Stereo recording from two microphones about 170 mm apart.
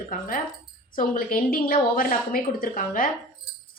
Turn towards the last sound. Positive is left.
turn(degrees=55)  # may be behind; listen again after turning